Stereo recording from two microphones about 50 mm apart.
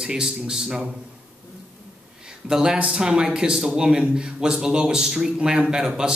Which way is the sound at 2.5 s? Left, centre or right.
Centre.